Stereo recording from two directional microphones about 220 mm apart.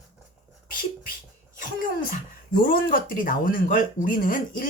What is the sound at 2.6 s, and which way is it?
Speech, 40° left (ahead or behind).